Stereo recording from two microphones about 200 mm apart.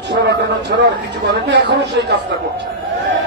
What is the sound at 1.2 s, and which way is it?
Speech, 60° right (ahead or behind).